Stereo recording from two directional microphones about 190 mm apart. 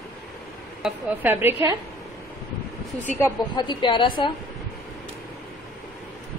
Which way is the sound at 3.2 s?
25° left (ahead or behind).